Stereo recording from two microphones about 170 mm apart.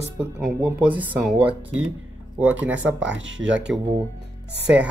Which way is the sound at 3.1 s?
90° right.